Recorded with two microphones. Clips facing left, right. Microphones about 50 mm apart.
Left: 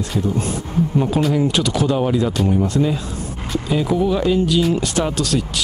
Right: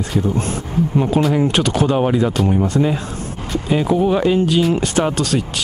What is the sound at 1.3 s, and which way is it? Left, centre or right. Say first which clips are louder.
Speech: right 2 dB; right.